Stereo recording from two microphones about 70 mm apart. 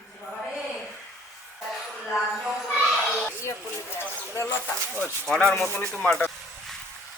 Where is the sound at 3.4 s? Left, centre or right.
Left.